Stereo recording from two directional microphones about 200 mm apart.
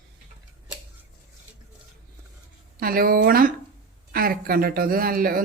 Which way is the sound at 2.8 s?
45° right (ahead or behind).